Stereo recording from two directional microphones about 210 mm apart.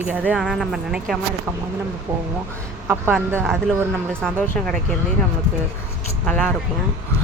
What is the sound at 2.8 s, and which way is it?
Speech, 10° right (ahead or behind).